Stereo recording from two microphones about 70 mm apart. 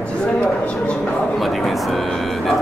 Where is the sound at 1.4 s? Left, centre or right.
Centre.